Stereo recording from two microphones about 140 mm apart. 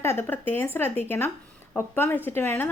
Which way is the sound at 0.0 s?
15° left (ahead or behind).